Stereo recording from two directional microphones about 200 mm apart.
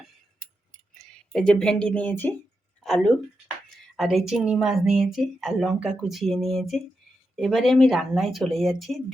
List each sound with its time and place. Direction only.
0.9 s a woman's voice: 5° left (ahead or behind)